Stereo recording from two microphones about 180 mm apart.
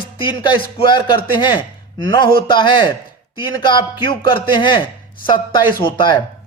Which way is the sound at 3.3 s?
25° left (ahead or behind).